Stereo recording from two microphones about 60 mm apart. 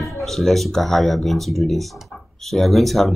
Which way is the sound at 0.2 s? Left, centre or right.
Centre.